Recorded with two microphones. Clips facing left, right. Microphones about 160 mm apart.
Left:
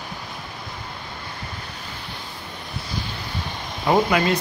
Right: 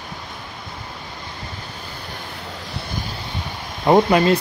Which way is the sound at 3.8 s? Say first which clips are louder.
Right 5 dB; 30° right (ahead or behind).